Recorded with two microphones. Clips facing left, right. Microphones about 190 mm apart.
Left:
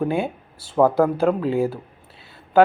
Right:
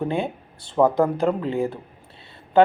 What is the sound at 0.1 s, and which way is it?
Speech, 5° left (ahead or behind).